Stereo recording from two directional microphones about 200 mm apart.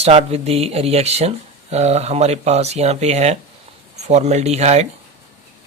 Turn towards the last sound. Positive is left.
turn(degrees=-35)  # may be behind; listen again after turning